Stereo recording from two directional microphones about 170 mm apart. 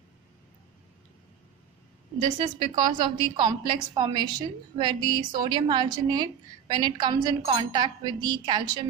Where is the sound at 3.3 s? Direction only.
25° right (ahead or behind).